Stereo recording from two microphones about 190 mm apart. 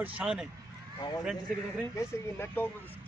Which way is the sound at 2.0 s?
10° left (ahead or behind).